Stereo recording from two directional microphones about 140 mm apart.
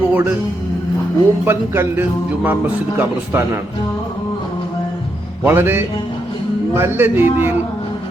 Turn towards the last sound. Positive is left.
turn(degrees=-15)  # may be behind; listen again after turning